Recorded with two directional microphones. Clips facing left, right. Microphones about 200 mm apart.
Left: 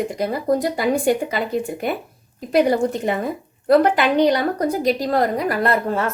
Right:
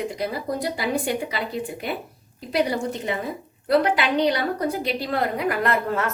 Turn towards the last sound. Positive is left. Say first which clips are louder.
# left 3 dB
turn(degrees=30)  # may be behind; listen again after turning